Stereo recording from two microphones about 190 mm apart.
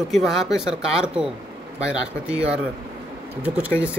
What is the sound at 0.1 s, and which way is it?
Speech, centre (ahead or behind).